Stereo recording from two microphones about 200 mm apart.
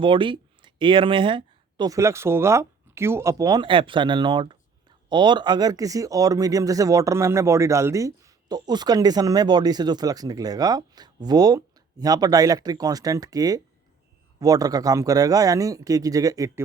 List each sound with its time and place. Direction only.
0.0 s speech: 25° right (ahead or behind)